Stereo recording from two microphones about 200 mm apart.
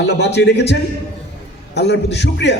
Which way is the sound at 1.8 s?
55° left (ahead or behind).